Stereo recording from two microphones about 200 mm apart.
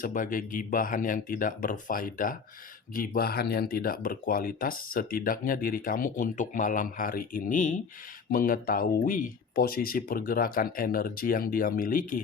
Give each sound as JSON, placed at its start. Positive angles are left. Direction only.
{"t": 0.0, "sound": "speech", "side_deg": 40}